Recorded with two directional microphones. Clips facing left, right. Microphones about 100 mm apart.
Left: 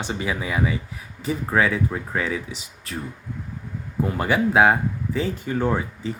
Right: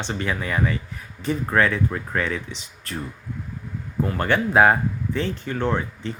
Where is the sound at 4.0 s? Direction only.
10° left (ahead or behind).